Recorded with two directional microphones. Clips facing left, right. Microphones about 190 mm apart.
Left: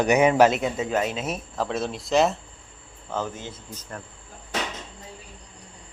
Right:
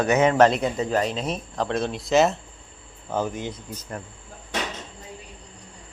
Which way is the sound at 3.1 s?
15° right (ahead or behind).